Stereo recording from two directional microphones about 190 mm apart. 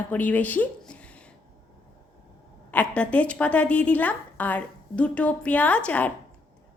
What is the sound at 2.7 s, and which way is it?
A woman's voice, 5° left (ahead or behind).